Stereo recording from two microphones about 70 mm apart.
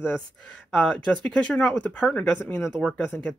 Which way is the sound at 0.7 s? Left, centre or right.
Centre.